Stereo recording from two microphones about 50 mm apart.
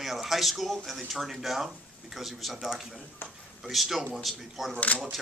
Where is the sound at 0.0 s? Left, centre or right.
Centre.